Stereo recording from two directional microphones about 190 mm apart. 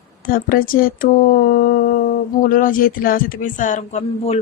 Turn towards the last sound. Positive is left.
turn(degrees=40)  # may be behind; listen again after turning